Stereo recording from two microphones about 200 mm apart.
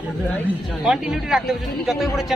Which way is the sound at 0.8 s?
Centre (ahead or behind).